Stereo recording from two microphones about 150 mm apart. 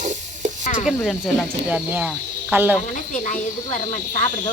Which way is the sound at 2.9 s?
55° left (ahead or behind).